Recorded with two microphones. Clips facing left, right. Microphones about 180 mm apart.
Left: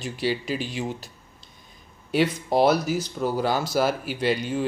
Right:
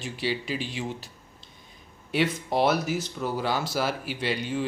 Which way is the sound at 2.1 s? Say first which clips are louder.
Left 4 dB; 40° left (ahead or behind).